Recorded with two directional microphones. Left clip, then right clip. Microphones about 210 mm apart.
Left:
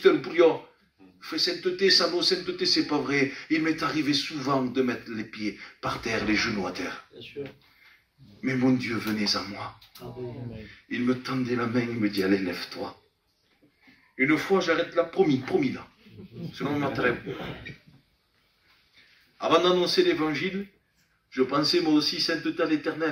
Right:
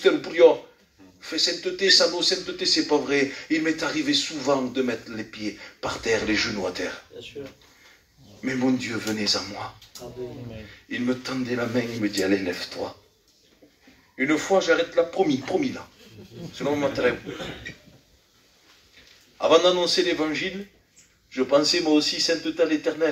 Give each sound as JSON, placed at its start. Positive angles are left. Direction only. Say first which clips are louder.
{"t": 0.0, "sound": "a man's voice", "louder": "right 3 dB", "side_deg": 20}
{"t": 8.4, "sound": "a man's voice", "louder": "right 1 dB", "side_deg": 20}
{"t": 10.7, "sound": "a man's voice", "louder": "right 1 dB", "side_deg": 20}
{"t": 14.1, "sound": "a man's voice", "louder": "right 2 dB", "side_deg": 20}
{"t": 19.4, "sound": "a man's voice", "louder": "right 4 dB", "side_deg": 20}